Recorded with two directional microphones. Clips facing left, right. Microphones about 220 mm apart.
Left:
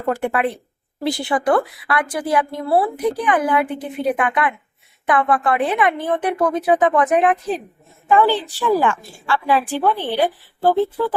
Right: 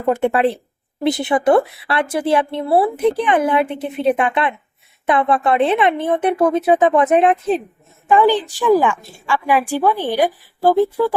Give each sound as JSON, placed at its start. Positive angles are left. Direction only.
{"t": 0.1, "sound": "a woman's voice", "side_deg": -25}